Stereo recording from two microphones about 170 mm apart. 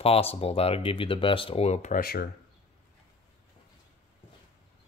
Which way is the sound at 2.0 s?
65° left (ahead or behind).